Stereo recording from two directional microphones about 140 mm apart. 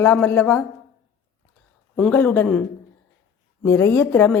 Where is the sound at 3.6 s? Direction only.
20° left (ahead or behind).